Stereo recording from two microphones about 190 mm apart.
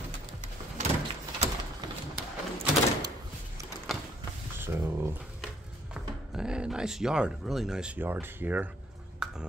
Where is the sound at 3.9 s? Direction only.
Centre (ahead or behind).